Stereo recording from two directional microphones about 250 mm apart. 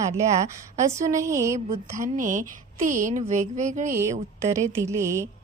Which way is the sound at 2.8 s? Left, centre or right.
Right.